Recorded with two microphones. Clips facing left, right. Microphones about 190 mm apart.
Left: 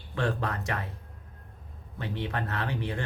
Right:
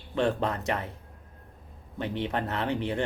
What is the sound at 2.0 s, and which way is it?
Speech, 20° right (ahead or behind).